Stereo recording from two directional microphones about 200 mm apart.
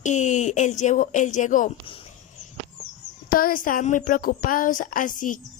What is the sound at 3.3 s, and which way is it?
A woman's voice, 45° left (ahead or behind).